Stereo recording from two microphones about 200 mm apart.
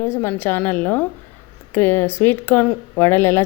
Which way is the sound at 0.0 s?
10° left (ahead or behind).